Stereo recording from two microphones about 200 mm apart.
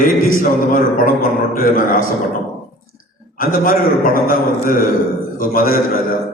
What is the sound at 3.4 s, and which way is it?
A man's voice, 45° left (ahead or behind).